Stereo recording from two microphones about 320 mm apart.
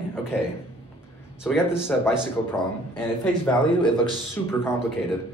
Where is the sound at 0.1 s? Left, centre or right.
Centre.